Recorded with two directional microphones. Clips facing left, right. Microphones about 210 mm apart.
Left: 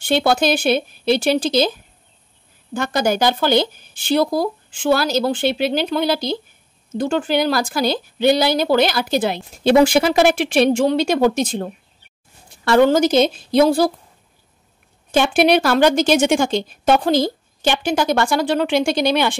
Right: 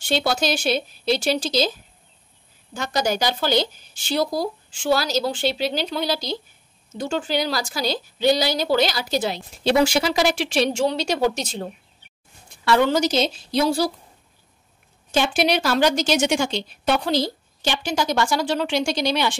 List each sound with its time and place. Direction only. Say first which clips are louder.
0.0 s speech: left 5 dB; 55° left (ahead or behind)
2.7 s a woman's voice: left 4 dB; 55° left (ahead or behind)
15.0 s speech: left 6 dB; 55° left (ahead or behind)